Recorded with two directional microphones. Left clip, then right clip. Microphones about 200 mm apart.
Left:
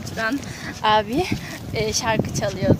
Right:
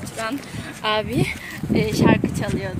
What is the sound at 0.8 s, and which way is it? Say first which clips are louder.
Speech: left 3 dB; 35° left (ahead or behind).